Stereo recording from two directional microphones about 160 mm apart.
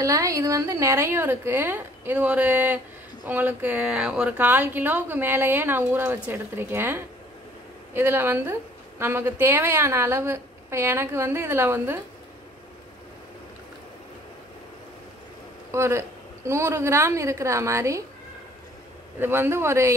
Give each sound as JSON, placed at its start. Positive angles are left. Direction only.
{"t": 0.0, "sound": "a woman's voice", "side_deg": -20}
{"t": 15.7, "sound": "a woman's voice", "side_deg": -15}
{"t": 19.1, "sound": "a woman's voice", "side_deg": -15}